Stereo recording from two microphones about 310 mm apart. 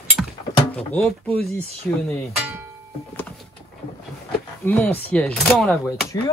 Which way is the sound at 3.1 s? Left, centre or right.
Centre.